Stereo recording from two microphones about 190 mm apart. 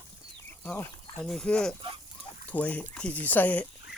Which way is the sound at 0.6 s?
10° left (ahead or behind).